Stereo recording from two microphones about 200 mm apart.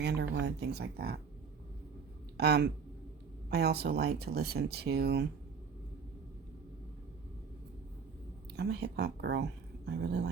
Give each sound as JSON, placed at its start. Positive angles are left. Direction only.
{"t": 0.0, "sound": "speech", "side_deg": -55}
{"t": 2.4, "sound": "speech", "side_deg": -55}
{"t": 8.5, "sound": "speech", "side_deg": -55}